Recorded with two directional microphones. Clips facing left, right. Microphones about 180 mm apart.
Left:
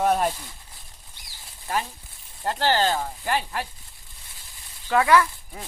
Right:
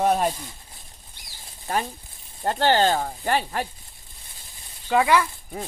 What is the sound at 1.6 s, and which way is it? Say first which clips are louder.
Speech: right 2 dB; 40° right (ahead or behind).